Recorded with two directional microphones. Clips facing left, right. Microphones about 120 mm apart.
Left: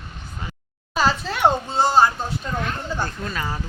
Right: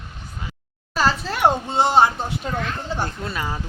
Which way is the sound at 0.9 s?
Centre (ahead or behind).